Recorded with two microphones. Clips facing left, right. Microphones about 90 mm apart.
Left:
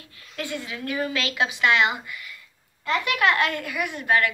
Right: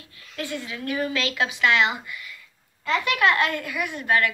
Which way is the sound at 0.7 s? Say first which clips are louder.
Right 1 dB; 25° left (ahead or behind).